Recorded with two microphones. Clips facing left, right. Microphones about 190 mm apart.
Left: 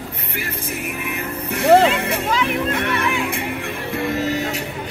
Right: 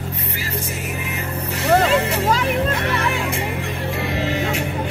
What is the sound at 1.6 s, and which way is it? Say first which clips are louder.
Music: left 3 dB; 55° left (ahead or behind).